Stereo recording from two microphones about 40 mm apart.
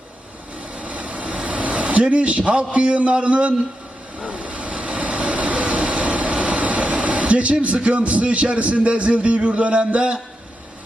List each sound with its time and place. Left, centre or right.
0.8 s vehicle: right